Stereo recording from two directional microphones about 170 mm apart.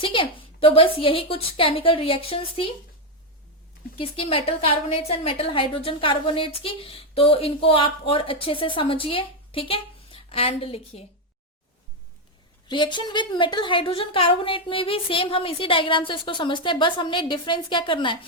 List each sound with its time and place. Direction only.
0.0 s a woman's voice: 30° left (ahead or behind)
3.9 s a woman's voice: 35° left (ahead or behind)
12.6 s a woman's voice: 25° left (ahead or behind)